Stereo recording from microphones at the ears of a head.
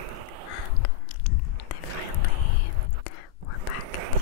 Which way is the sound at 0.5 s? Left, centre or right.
Left.